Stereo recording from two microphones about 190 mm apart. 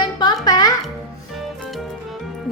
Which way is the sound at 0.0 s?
25° left (ahead or behind).